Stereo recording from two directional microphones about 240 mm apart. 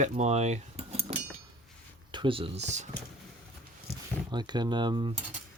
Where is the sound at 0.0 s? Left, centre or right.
Right.